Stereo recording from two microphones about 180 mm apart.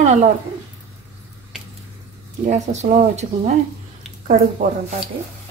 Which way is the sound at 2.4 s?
40° right (ahead or behind).